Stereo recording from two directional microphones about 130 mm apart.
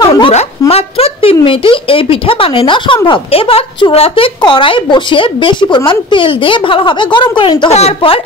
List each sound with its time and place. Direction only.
0.0 s a sound: 35° left (ahead or behind)
0.3 s a woman's voice: 55° left (ahead or behind); by 7.7 s 40° left (ahead or behind)
7.7 s speech: 50° left (ahead or behind)